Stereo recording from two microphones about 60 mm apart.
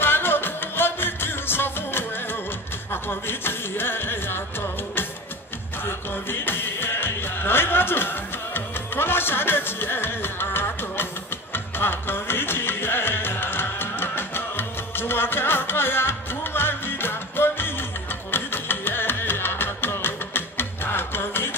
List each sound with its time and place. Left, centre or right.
0.0 s music: left